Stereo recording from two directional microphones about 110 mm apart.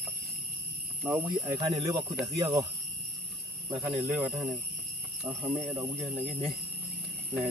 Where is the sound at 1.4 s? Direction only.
35° right (ahead or behind).